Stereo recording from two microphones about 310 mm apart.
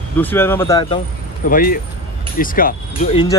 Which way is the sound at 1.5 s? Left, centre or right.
Left.